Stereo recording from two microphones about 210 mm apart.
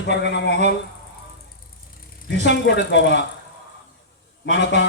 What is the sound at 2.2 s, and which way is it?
Speech, 55° left (ahead or behind).